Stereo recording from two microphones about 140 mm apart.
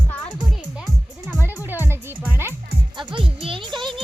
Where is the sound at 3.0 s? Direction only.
35° right (ahead or behind).